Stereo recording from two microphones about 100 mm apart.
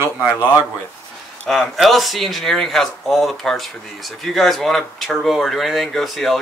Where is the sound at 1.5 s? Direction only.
Centre (ahead or behind).